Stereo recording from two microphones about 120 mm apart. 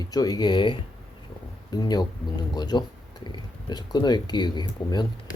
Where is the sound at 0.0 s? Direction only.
35° left (ahead or behind).